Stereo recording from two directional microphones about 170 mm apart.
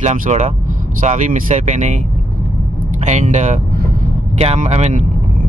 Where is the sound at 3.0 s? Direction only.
45° right (ahead or behind).